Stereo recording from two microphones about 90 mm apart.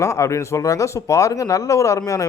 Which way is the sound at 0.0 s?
35° left (ahead or behind).